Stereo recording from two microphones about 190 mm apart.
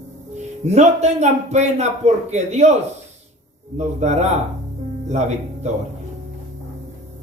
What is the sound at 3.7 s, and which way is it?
Speech, 35° right (ahead or behind).